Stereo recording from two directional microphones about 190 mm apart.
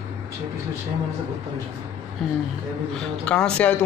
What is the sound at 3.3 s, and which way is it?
Speech, 5° left (ahead or behind).